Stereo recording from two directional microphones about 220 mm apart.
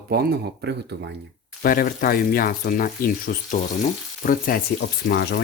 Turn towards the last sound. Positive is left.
turn(degrees=45)  # may be behind; listen again after turning